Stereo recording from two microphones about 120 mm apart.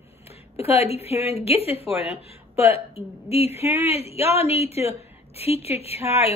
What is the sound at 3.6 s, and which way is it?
Speech, 20° right (ahead or behind).